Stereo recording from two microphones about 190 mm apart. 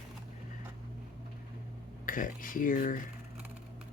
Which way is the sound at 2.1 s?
45° left (ahead or behind).